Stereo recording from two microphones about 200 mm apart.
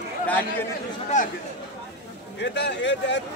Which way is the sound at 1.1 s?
40° left (ahead or behind).